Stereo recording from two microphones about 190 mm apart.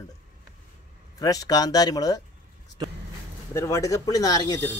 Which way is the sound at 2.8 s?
20° right (ahead or behind).